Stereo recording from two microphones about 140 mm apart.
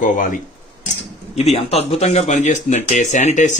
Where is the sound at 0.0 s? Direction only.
70° left (ahead or behind).